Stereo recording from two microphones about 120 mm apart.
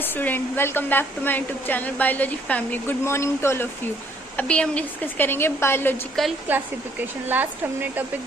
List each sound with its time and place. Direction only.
0.0 s a woman's voice: 15° left (ahead or behind)
4.4 s a woman's voice: 10° left (ahead or behind)
6.2 s a woman's voice: 5° left (ahead or behind)
7.3 s speech: 15° right (ahead or behind)